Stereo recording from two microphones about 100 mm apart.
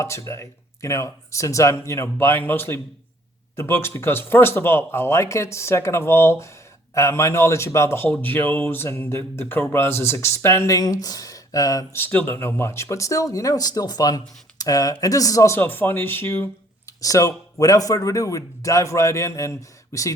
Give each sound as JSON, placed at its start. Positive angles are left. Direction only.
{"t": 0.0, "sound": "speech", "side_deg": 30}
{"t": 10.8, "sound": "speech", "side_deg": 40}
{"t": 11.9, "sound": "speech", "side_deg": 20}
{"t": 16.8, "sound": "speech", "side_deg": 35}